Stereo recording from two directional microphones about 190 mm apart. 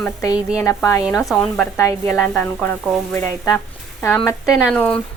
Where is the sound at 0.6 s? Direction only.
15° left (ahead or behind).